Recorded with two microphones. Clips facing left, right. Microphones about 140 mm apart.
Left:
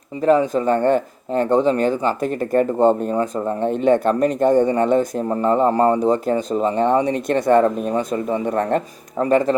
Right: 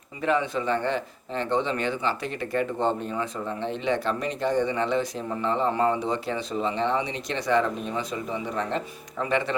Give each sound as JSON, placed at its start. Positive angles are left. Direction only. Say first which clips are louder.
{"t": 0.2, "sound": "speech", "louder": "left 9 dB", "side_deg": 40}